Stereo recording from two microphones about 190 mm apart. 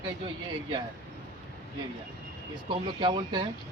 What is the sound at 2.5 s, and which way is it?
Speech, 25° right (ahead or behind).